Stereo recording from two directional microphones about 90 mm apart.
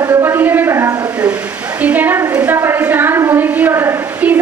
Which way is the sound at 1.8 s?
20° right (ahead or behind).